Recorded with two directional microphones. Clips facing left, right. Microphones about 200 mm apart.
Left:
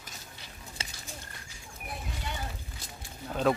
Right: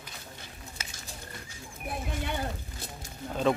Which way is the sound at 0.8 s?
30° left (ahead or behind).